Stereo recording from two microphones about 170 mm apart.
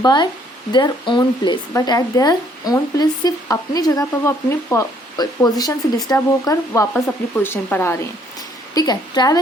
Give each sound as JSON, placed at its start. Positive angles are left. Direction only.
{"t": 0.0, "sound": "speech", "side_deg": 25}